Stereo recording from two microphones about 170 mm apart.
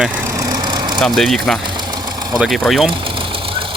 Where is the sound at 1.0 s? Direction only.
Centre (ahead or behind).